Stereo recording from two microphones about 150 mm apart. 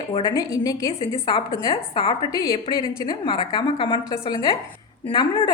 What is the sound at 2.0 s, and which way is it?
A woman's voice, 35° left (ahead or behind).